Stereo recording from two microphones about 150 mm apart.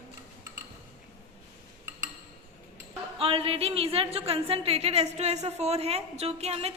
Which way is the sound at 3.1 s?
40° right (ahead or behind).